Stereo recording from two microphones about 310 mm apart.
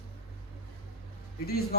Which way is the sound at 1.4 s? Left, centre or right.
Left.